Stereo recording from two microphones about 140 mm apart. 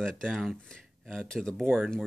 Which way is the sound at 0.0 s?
5° left (ahead or behind).